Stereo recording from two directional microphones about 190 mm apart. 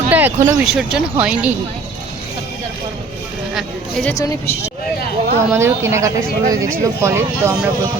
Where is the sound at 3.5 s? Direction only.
Centre (ahead or behind).